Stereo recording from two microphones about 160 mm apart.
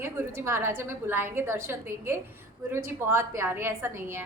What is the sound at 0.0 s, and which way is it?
A woman's voice, 15° right (ahead or behind).